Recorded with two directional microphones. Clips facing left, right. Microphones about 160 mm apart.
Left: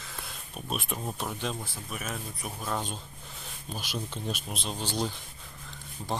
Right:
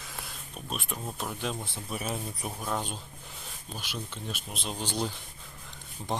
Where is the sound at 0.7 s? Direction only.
5° left (ahead or behind).